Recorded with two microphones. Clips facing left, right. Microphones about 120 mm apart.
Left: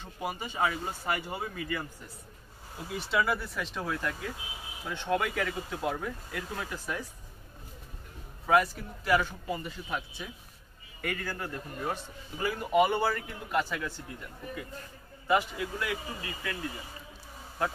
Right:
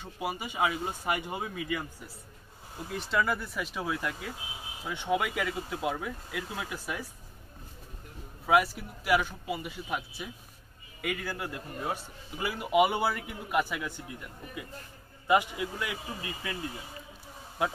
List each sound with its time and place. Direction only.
0.0 s a man's voice: 10° right (ahead or behind)
2.9 s speech: 5° left (ahead or behind)
8.5 s a man's voice: 10° right (ahead or behind)
15.2 s a man's voice: 15° right (ahead or behind)